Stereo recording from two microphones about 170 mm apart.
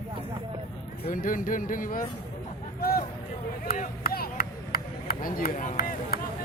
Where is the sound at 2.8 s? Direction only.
65° left (ahead or behind).